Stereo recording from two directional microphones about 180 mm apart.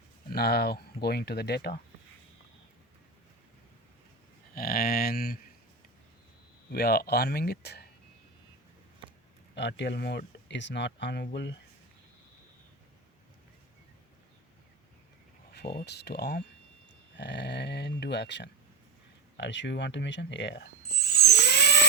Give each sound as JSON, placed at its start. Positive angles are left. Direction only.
{"t": 0.3, "sound": "speech", "side_deg": 60}
{"t": 4.5, "sound": "speech", "side_deg": 55}
{"t": 6.7, "sound": "speech", "side_deg": 60}
{"t": 9.6, "sound": "speech", "side_deg": 75}
{"t": 15.5, "sound": "speech", "side_deg": 60}
{"t": 19.4, "sound": "speech", "side_deg": 80}
{"t": 21.1, "sound": "a sound", "side_deg": 65}